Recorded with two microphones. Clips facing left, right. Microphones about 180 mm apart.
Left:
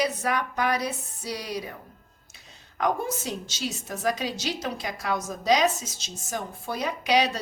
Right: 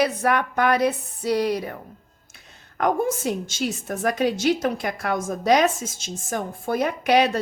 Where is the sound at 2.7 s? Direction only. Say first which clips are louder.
Right 5 dB; 50° right (ahead or behind).